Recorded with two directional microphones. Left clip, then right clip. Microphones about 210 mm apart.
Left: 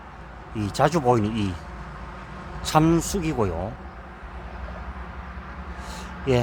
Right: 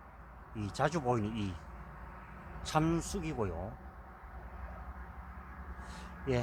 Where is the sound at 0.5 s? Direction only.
10° left (ahead or behind).